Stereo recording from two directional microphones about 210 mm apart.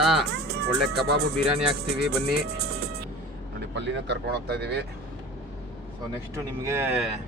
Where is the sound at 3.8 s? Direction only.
60° right (ahead or behind).